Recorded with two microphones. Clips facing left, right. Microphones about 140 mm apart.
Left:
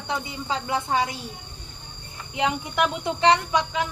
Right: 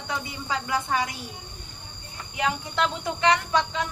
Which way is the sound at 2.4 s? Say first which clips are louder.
Left 2 dB; 15° left (ahead or behind).